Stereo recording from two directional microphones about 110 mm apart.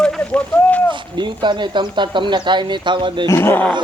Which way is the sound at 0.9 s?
45° right (ahead or behind).